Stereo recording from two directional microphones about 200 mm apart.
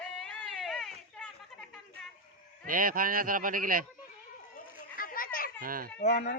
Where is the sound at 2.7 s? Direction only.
45° right (ahead or behind).